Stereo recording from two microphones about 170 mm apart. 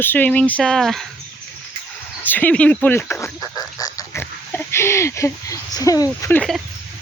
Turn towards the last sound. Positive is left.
turn(degrees=15)  # may be behind; listen again after turning